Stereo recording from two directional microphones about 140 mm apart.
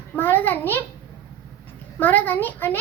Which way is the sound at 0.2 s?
15° left (ahead or behind).